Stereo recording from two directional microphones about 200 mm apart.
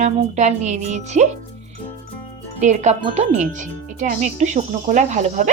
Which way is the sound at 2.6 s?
35° right (ahead or behind).